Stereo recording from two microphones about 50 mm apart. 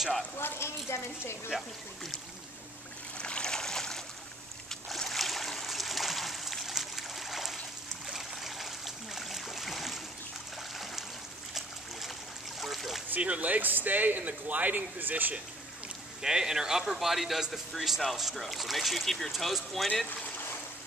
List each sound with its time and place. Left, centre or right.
0.4 s a woman's voice: left
1.5 s a man's voice: centre
3.2 s a sound: centre
8.1 s stream: centre
12.5 s a sound: centre
13.1 s speech: right
16.2 s a man's voice: centre